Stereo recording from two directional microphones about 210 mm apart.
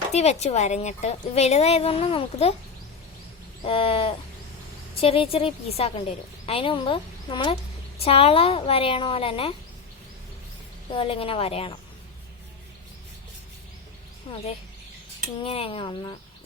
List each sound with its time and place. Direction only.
0.1 s a woman's voice: 30° left (ahead or behind)
3.6 s a woman's voice: 25° left (ahead or behind)
10.9 s a woman's voice: 25° left (ahead or behind)
14.3 s a woman's voice: 25° left (ahead or behind)
15.4 s a woman's voice: 25° left (ahead or behind)